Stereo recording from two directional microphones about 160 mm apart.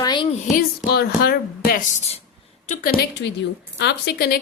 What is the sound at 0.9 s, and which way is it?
Speech, 90° left.